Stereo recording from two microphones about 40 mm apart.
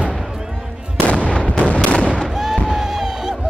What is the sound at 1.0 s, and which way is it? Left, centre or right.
Artillery fire, left.